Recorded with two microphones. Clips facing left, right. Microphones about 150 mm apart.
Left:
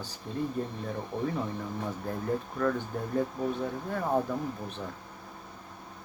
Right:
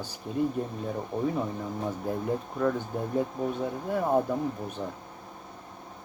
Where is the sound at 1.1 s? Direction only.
25° right (ahead or behind).